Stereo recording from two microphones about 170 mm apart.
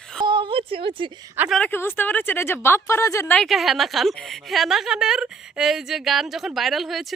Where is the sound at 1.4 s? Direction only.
Centre (ahead or behind).